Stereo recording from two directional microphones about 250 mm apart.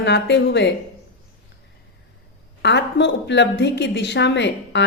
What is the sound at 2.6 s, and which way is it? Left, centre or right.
A woman's voice, left.